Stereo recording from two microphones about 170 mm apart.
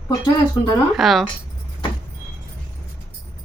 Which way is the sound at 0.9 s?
Centre (ahead or behind).